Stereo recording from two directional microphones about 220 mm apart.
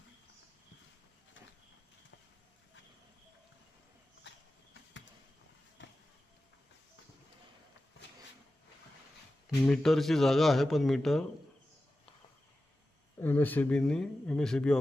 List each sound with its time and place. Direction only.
4.2 s a sound: 55° left (ahead or behind)
9.6 s speech: centre (ahead or behind)
13.1 s speech: 10° left (ahead or behind)